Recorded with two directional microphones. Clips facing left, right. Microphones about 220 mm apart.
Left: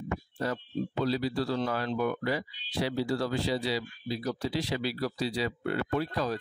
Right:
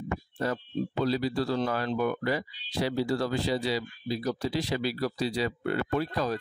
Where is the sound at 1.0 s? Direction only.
45° right (ahead or behind).